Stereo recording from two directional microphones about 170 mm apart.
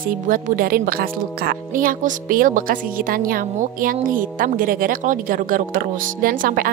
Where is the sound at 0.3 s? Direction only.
60° right (ahead or behind).